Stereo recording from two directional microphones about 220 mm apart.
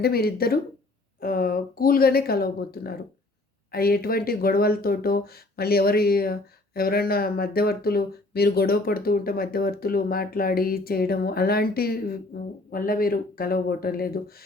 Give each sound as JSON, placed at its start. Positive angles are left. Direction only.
{"t": 0.0, "sound": "speech", "side_deg": 45}